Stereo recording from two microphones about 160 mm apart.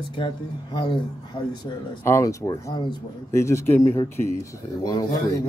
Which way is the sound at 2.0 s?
20° left (ahead or behind).